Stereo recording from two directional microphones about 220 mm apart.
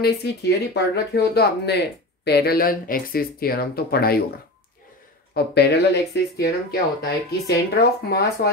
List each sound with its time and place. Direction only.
0.0 s speech: 50° left (ahead or behind)
5.3 s speech: 50° left (ahead or behind)